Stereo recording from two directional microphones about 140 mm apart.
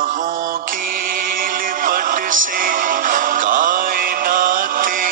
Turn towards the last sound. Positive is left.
turn(degrees=-75)  # may be behind; listen again after turning